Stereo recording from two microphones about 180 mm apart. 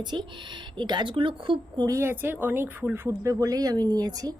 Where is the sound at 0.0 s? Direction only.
25° right (ahead or behind).